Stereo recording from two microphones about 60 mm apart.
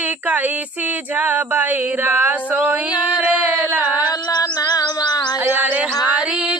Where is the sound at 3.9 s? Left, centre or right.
Left.